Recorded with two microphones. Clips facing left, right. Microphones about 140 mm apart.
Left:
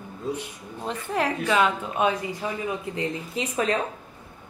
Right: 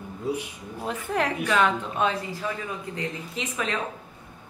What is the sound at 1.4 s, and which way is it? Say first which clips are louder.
Speech: left 1 dB; 10° left (ahead or behind).